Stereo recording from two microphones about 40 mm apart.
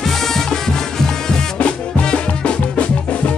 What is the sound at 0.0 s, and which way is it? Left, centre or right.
Music, centre.